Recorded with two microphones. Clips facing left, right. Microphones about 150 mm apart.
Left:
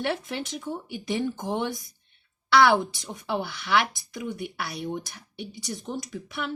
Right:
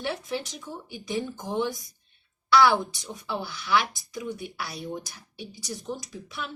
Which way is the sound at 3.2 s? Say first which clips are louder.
Left 2 dB; 60° left (ahead or behind).